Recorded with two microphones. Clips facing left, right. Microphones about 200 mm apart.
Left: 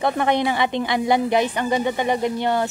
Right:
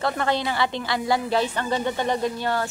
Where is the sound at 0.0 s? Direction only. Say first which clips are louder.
Left 4 dB; 20° left (ahead or behind).